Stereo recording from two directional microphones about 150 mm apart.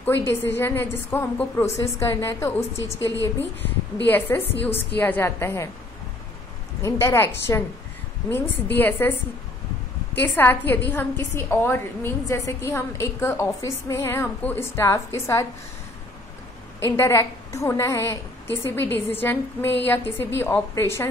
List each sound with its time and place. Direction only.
0.3 s a woman's voice: 15° left (ahead or behind)
4.1 s a woman's voice: 10° left (ahead or behind)
6.8 s a woman's voice: 20° left (ahead or behind)
10.2 s a woman's voice: 15° left (ahead or behind)
16.8 s a woman's voice: 15° left (ahead or behind)